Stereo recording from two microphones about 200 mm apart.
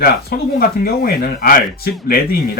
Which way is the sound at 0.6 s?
50° left (ahead or behind).